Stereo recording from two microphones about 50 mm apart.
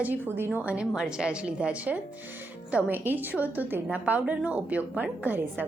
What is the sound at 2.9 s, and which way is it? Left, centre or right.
A woman's voice, right.